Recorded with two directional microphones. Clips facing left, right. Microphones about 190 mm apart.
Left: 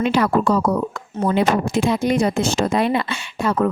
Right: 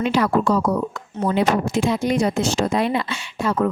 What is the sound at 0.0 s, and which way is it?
Speech, 60° left (ahead or behind).